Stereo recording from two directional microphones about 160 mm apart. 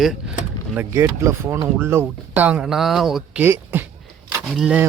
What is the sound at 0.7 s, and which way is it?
Speech, 15° right (ahead or behind).